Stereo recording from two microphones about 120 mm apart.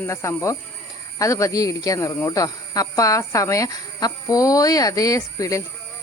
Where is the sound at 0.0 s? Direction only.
25° left (ahead or behind).